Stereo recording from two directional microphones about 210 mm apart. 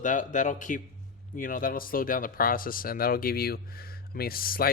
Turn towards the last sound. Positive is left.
turn(degrees=45)  # may be behind; listen again after turning